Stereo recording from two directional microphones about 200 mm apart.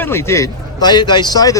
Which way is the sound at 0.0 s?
10° left (ahead or behind).